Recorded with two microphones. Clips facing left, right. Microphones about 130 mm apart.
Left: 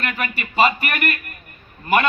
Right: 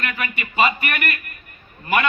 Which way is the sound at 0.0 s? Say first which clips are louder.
Left 2 dB; 40° left (ahead or behind).